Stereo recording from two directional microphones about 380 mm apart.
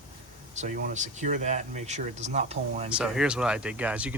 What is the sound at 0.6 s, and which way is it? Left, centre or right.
Speech, centre.